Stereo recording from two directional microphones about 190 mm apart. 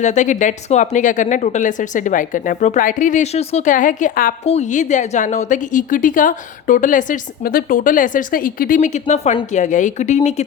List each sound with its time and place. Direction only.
0.0 s speech: 40° left (ahead or behind)
4.4 s speech: 35° left (ahead or behind)